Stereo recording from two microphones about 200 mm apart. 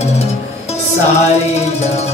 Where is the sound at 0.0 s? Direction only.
30° left (ahead or behind).